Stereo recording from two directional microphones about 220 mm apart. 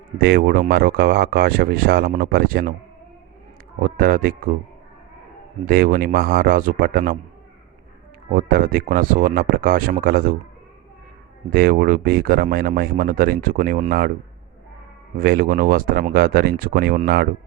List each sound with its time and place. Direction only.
0.2 s speech: 45° right (ahead or behind)
3.8 s speech: 40° right (ahead or behind)
5.6 s speech: 40° right (ahead or behind)
8.3 s speech: 40° right (ahead or behind)
11.5 s speech: 40° right (ahead or behind)
15.2 s speech: 40° right (ahead or behind)